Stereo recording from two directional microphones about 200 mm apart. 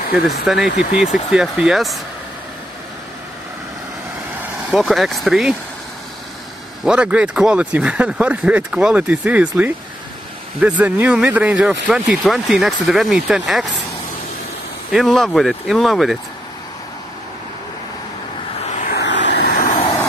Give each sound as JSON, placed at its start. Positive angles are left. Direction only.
{"t": 0.7, "sound": "speech", "side_deg": 0}
{"t": 4.6, "sound": "speech", "side_deg": 0}
{"t": 6.8, "sound": "speech", "side_deg": -5}
{"t": 14.9, "sound": "speech", "side_deg": 0}
{"t": 18.7, "sound": "vehicle", "side_deg": 35}
{"t": 18.9, "sound": "vehicle", "side_deg": 60}